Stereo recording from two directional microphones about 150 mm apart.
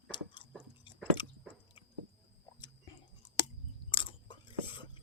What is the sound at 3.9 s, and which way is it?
Chewing, 35° left (ahead or behind).